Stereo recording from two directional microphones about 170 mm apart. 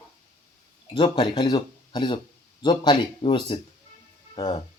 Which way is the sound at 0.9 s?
30° left (ahead or behind).